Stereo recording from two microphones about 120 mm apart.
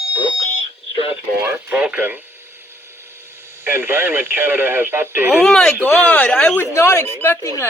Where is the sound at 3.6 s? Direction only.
20° right (ahead or behind).